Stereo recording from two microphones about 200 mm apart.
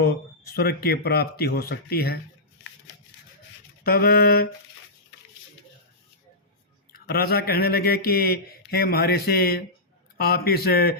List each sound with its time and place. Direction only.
0.0 s a man's voice: 50° left (ahead or behind)
3.8 s a man's voice: 50° left (ahead or behind)
7.1 s a man's voice: 50° left (ahead or behind)